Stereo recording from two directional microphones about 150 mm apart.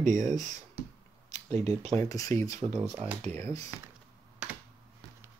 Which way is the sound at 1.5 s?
45° right (ahead or behind).